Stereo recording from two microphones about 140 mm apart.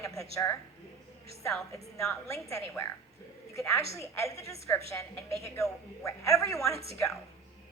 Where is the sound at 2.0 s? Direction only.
20° left (ahead or behind).